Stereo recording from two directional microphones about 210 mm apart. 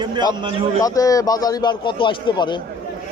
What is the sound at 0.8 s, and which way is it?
A man's voice, 15° left (ahead or behind).